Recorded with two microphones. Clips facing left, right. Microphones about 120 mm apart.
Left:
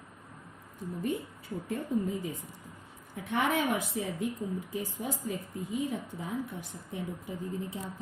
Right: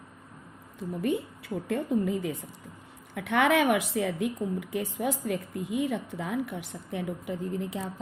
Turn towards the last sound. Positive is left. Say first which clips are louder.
# right 4 dB
turn(degrees=-85)